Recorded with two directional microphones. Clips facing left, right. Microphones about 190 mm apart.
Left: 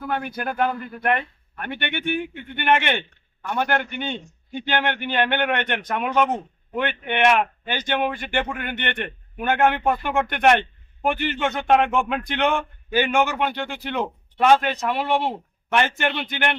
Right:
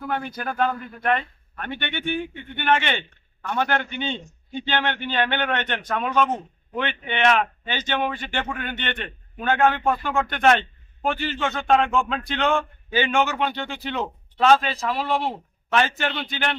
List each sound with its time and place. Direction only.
0.2 s speech: 10° left (ahead or behind)